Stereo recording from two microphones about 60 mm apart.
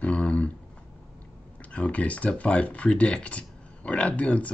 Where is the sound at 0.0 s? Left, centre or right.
Left.